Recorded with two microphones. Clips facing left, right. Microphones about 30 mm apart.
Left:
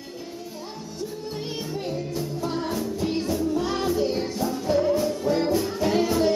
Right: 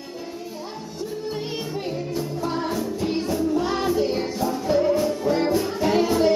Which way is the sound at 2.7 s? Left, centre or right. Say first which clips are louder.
Right 2 dB; centre.